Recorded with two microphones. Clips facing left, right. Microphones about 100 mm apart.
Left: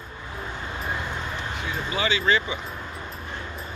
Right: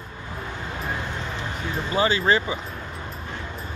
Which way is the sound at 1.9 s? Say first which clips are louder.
Right 3 dB; 40° right (ahead or behind).